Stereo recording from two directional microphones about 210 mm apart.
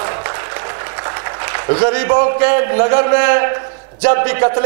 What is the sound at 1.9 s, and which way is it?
A man's voice, 20° right (ahead or behind).